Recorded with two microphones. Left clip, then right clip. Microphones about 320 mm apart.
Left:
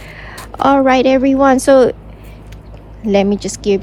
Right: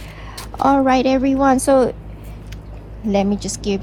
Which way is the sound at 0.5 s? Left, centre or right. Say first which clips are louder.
Left 4 dB; right.